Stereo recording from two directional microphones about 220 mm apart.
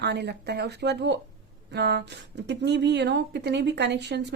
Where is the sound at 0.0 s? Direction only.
50° right (ahead or behind).